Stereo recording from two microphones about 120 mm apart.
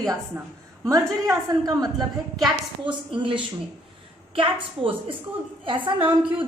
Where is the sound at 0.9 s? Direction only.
30° right (ahead or behind).